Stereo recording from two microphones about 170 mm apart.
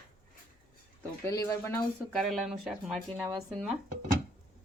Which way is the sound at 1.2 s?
20° left (ahead or behind).